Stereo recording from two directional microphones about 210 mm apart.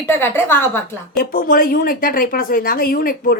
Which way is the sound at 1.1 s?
45° left (ahead or behind).